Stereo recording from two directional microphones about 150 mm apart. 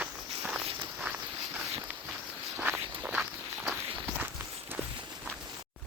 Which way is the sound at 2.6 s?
10° right (ahead or behind).